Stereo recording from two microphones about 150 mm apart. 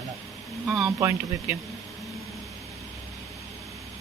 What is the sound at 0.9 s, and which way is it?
Speech, 20° right (ahead or behind).